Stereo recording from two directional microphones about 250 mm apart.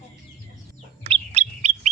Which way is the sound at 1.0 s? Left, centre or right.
Right.